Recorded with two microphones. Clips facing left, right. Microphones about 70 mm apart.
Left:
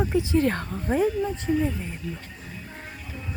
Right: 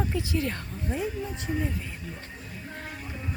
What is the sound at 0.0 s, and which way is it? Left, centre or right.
Speech, left.